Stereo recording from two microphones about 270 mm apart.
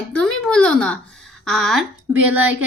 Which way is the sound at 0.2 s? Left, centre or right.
Centre.